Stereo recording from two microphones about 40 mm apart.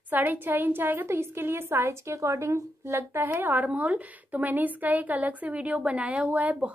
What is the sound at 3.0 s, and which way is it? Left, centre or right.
Speech, right.